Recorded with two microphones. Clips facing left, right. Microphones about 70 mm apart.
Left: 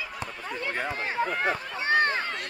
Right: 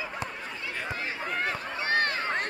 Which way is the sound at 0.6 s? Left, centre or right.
Left.